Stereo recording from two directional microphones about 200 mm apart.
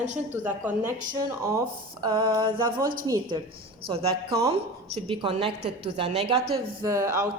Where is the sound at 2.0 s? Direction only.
20° right (ahead or behind).